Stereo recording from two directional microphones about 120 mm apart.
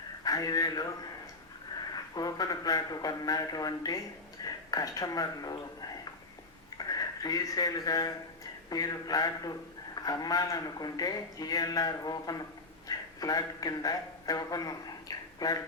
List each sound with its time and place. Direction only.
0.3 s speech: 30° left (ahead or behind)
2.1 s a man's voice: 30° left (ahead or behind)